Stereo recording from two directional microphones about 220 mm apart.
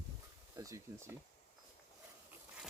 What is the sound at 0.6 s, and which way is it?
Speech, 15° right (ahead or behind).